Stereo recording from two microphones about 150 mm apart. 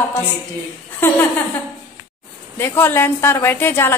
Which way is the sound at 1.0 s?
15° left (ahead or behind).